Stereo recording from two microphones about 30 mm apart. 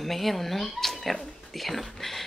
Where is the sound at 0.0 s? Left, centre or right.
Centre.